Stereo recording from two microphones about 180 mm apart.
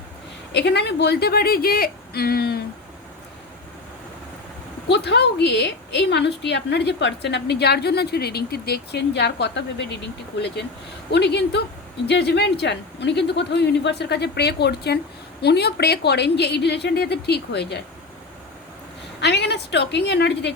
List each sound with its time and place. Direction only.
0.5 s speech: 70° left (ahead or behind)
4.9 s a woman's voice: 70° left (ahead or behind)
11.1 s a woman's voice: 70° left (ahead or behind)
19.2 s a woman's voice: 70° left (ahead or behind)